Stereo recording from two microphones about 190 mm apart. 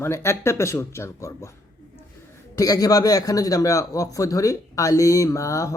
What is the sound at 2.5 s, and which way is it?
Speech, 20° left (ahead or behind).